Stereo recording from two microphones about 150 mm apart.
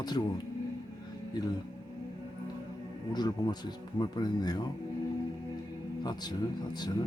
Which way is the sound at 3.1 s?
25° left (ahead or behind).